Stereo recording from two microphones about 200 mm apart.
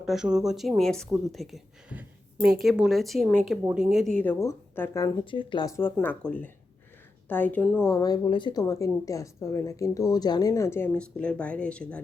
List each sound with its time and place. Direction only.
0.0 s a woman's voice: centre (ahead or behind)
7.9 s a woman's voice: 15° left (ahead or behind)